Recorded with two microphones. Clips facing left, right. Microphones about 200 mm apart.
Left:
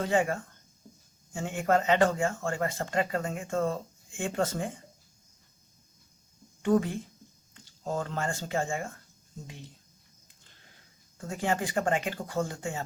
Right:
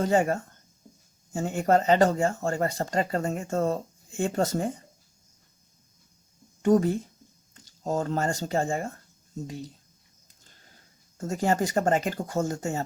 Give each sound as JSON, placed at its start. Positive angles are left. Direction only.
{"t": 0.0, "sound": "speech", "side_deg": -40}
{"t": 6.6, "sound": "speech", "side_deg": -40}
{"t": 11.2, "sound": "speech", "side_deg": -40}